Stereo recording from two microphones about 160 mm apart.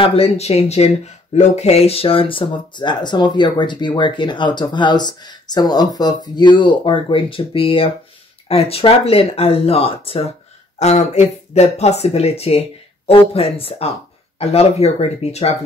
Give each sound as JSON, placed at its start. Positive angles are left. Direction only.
{"t": 0.0, "sound": "speech", "side_deg": 40}